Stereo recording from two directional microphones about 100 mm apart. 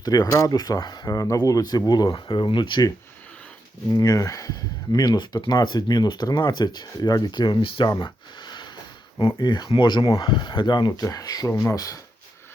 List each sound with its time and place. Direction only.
0.0 s speech: 40° left (ahead or behind)
3.9 s speech: 35° left (ahead or behind)